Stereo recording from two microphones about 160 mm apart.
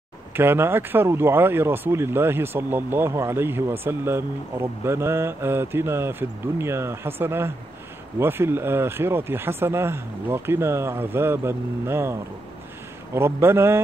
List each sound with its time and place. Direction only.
0.3 s speech: 15° right (ahead or behind)